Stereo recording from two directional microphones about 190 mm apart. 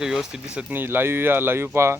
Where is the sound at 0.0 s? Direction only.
5° right (ahead or behind).